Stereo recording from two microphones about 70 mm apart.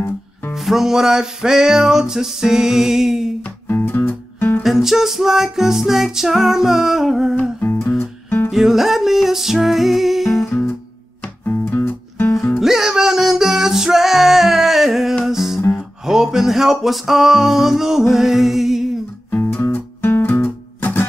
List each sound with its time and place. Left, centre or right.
0.6 s music: centre
3.6 s music: left
4.6 s music: centre
8.0 s music: left
8.5 s music: centre
11.7 s music: left
12.5 s music: centre
19.3 s music: left